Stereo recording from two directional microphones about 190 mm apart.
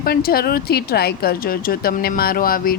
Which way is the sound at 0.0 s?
55° left (ahead or behind).